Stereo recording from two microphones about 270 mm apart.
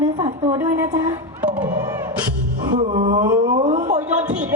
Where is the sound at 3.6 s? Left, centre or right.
Right.